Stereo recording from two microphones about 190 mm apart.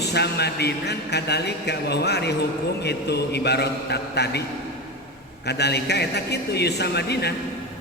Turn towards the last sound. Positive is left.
turn(degrees=60)  # may be behind; listen again after turning